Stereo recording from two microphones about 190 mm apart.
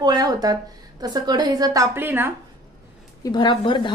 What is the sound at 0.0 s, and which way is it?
A woman's voice, 20° right (ahead or behind).